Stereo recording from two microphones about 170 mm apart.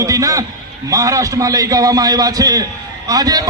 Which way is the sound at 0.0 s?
20° right (ahead or behind).